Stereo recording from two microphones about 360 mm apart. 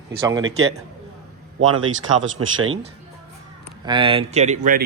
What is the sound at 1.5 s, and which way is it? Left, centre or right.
Speech, right.